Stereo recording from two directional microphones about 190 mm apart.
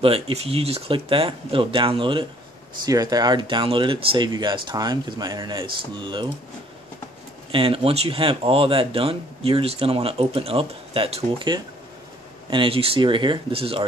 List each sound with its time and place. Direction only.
0.0 s speech: 30° right (ahead or behind)
7.5 s speech: 30° right (ahead or behind)